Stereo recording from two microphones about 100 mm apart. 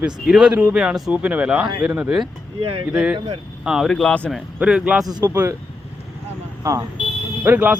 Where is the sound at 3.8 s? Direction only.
10° left (ahead or behind).